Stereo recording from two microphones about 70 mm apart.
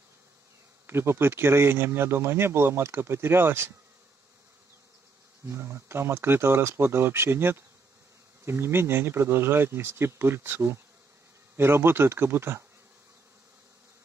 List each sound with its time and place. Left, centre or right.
0.8 s speech: right
5.5 s speech: right